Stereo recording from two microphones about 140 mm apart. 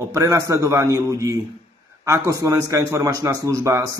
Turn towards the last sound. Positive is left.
turn(degrees=-25)  # may be behind; listen again after turning